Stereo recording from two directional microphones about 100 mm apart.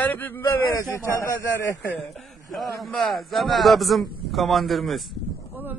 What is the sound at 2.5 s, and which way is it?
A man's voice, centre (ahead or behind).